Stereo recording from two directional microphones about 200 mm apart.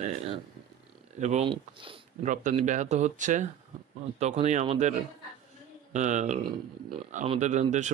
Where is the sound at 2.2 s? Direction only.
40° right (ahead or behind).